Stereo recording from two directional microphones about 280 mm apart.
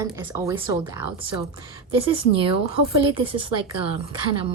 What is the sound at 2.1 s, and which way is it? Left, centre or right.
A woman's voice, centre.